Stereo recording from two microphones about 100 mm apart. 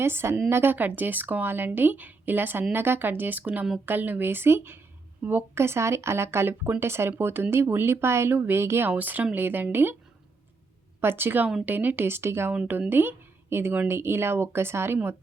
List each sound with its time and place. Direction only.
0.0 s speech: 25° right (ahead or behind)
11.0 s speech: 20° right (ahead or behind)